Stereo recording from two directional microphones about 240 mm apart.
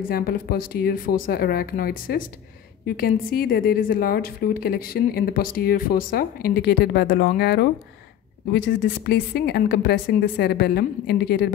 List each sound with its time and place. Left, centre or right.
0.1 s a woman's voice: left